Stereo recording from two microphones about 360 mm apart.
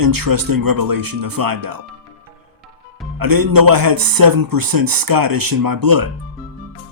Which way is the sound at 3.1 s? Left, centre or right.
Right.